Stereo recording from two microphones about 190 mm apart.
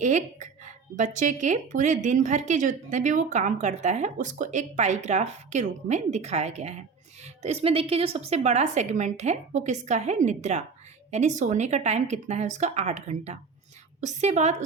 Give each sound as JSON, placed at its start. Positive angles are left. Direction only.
{"t": 0.0, "sound": "a woman's voice", "side_deg": -40}